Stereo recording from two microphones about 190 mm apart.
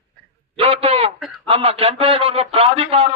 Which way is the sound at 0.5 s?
30° right (ahead or behind).